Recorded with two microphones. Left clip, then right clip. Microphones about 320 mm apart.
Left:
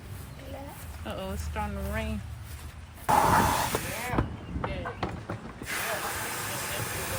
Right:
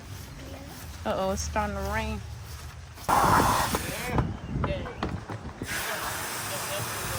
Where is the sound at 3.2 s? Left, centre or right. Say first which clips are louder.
Right 2 dB; centre.